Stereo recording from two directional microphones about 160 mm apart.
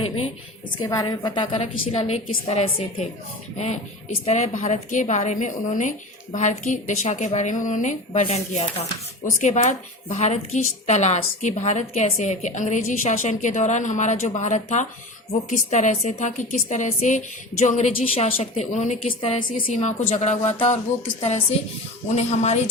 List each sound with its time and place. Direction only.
0.8 s a woman's voice: 25° left (ahead or behind); by 3.1 s 40° left (ahead or behind)
4.3 s a woman's voice: 45° left (ahead or behind)
8.1 s a woman's voice: 40° left (ahead or behind)
19.2 s a woman's voice: 35° left (ahead or behind)
19.7 s a woman's voice: 45° left (ahead or behind)
22.1 s a woman's voice: 45° left (ahead or behind)